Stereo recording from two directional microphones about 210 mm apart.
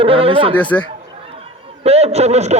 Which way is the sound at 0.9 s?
30° right (ahead or behind).